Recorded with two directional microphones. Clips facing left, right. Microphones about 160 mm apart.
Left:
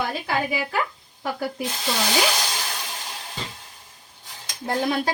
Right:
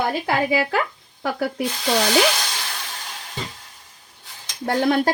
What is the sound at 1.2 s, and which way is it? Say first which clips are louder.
Speech: right 4 dB; 75° right (ahead or behind).